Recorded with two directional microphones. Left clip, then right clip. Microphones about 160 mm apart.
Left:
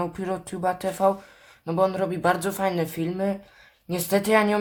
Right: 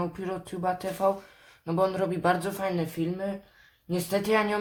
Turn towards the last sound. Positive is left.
turn(degrees=20)  # may be behind; listen again after turning